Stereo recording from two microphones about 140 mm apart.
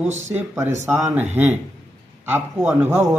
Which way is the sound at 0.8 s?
10° right (ahead or behind).